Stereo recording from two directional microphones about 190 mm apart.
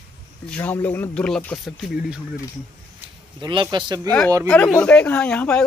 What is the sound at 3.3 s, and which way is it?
Speech, 25° right (ahead or behind).